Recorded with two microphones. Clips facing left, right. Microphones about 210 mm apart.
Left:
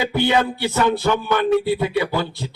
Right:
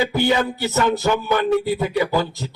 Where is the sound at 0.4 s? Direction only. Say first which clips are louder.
Even; 40° right (ahead or behind).